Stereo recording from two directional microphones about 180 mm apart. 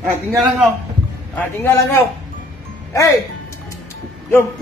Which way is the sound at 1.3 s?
15° left (ahead or behind).